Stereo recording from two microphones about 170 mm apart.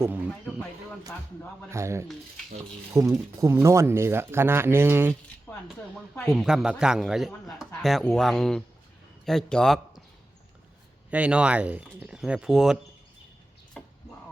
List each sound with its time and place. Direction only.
0.0 s speech: 10° right (ahead or behind)
1.7 s speech: 15° right (ahead or behind)
5.5 s a sound: 15° left (ahead or behind)
6.1 s a man's voice: centre (ahead or behind)
11.1 s speech: 5° right (ahead or behind)
13.7 s chop: 5° left (ahead or behind)